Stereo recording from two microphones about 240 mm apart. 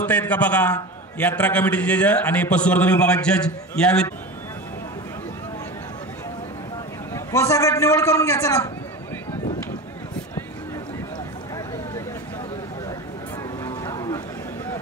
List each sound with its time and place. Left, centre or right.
0.0 s a man's voice: centre
7.2 s a man's voice: centre
13.7 s boat: centre